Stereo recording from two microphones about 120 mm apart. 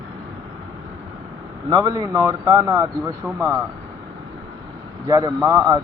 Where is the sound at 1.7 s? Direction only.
30° right (ahead or behind).